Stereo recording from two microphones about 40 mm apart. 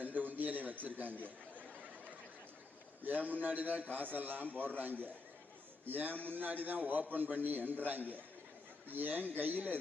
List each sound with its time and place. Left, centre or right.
0.0 s a sound: right
3.0 s a man's voice: right
5.8 s a man's voice: right